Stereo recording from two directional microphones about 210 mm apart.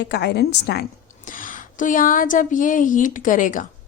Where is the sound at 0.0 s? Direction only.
50° left (ahead or behind).